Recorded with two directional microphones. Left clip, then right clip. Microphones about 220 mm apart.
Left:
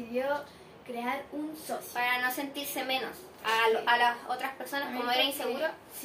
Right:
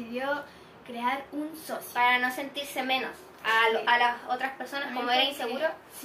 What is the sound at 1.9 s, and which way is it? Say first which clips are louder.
Speech: right 5 dB; 15° left (ahead or behind).